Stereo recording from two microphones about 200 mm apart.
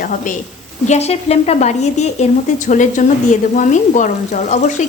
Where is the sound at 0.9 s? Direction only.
30° left (ahead or behind).